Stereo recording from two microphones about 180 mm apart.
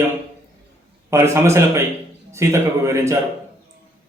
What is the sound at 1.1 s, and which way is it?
Speech, 15° right (ahead or behind).